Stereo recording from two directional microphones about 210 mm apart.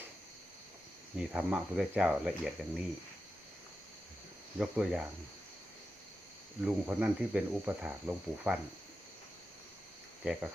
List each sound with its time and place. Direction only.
1.3 s cricket: 5° right (ahead or behind)
4.5 s cricket: 5° right (ahead or behind)
6.6 s cricket: 5° right (ahead or behind)